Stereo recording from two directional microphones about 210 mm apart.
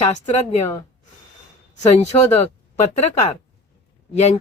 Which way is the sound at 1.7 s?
30° left (ahead or behind).